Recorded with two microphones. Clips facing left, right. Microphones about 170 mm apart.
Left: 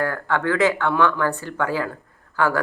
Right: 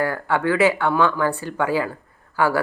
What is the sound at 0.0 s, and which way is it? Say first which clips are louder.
A man's voice: right 1 dB; 10° right (ahead or behind).